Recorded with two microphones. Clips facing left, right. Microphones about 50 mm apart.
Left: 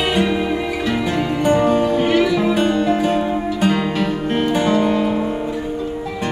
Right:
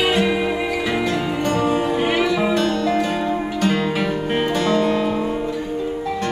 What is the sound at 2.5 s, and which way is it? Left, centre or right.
Music, centre.